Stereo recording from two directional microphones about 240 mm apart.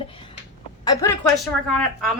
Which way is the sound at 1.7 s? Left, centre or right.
Centre.